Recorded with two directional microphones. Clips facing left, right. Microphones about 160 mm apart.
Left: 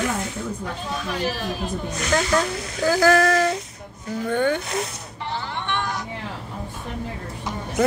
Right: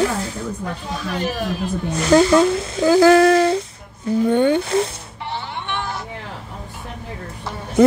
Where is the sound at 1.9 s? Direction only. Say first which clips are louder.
Right 9 dB; 30° right (ahead or behind).